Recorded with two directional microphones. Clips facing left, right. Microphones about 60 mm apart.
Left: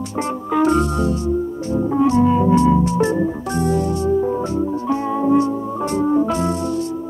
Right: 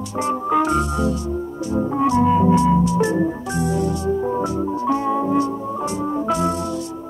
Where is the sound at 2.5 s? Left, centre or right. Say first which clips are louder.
Left 1 dB; left.